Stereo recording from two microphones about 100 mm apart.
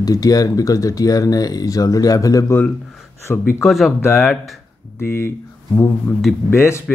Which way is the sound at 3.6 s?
Centre (ahead or behind).